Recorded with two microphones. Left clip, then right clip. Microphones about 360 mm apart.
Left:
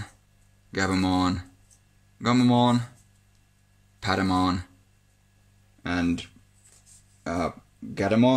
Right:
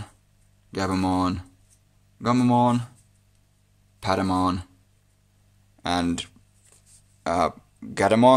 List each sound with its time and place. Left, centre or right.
0.7 s speech: centre
4.0 s speech: centre
5.8 s a sound: centre
7.2 s speech: centre